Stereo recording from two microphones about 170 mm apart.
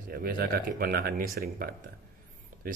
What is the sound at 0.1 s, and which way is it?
Speech, 60° right (ahead or behind).